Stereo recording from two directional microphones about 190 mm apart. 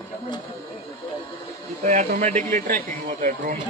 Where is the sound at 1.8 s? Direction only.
40° right (ahead or behind).